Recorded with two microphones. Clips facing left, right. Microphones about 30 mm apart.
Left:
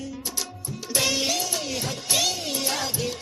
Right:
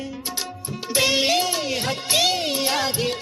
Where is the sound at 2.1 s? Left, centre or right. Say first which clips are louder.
Right 5 dB; right.